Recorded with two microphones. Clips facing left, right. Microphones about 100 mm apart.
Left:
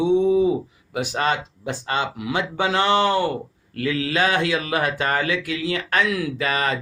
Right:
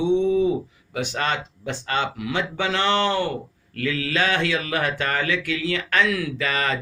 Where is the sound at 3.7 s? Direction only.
30° left (ahead or behind).